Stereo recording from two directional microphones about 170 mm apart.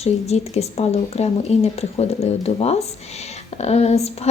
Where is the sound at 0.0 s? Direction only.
40° left (ahead or behind).